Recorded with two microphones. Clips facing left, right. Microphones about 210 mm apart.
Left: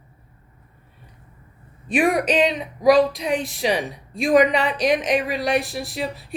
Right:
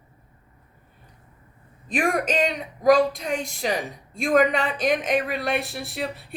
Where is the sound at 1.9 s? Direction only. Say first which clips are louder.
Left 4 dB; 45° right (ahead or behind).